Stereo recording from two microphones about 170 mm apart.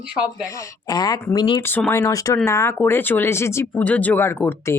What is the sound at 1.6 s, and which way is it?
Speech, 10° left (ahead or behind).